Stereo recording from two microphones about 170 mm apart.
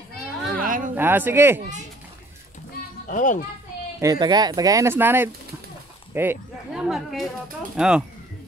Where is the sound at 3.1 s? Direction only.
50° left (ahead or behind).